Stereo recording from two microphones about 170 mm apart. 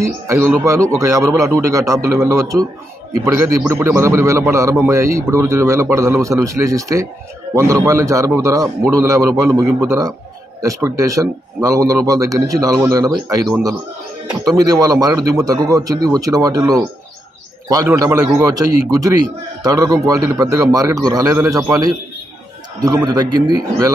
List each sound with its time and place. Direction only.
0.0 s a man's voice: 15° right (ahead or behind)